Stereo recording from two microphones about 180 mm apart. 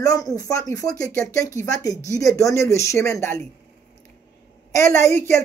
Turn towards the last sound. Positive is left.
turn(degrees=15)  # may be behind; listen again after turning